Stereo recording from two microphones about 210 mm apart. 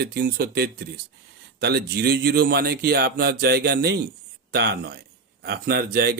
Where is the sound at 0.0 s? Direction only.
50° right (ahead or behind).